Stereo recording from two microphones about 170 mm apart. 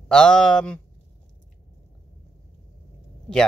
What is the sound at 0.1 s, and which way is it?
Speech, 5° left (ahead or behind).